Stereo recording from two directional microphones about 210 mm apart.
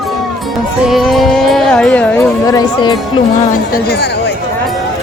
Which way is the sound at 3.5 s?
45° left (ahead or behind).